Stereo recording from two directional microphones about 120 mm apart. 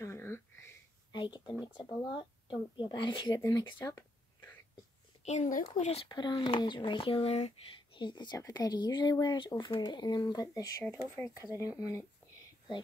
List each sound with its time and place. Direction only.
0.0 s a sound: 20° left (ahead or behind)
1.1 s speech: 40° left (ahead or behind)
1.5 s speech: 10° right (ahead or behind)
1.8 s speech: 40° left (ahead or behind)
5.2 s speech: 75° left (ahead or behind)
6.0 s speech: 35° left (ahead or behind); by 7.5 s 60° left (ahead or behind)
7.9 s speech: 40° left (ahead or behind)
11.1 s speech: 20° left (ahead or behind)